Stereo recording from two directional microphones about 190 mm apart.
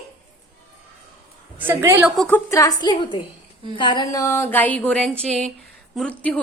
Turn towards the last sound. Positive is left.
turn(degrees=5)  # may be behind; listen again after turning